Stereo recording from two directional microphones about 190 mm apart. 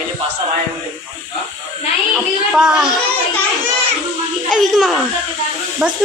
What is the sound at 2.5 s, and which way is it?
Speech, 5° right (ahead or behind).